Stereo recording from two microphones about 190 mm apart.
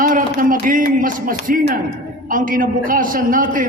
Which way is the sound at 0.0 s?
45° right (ahead or behind).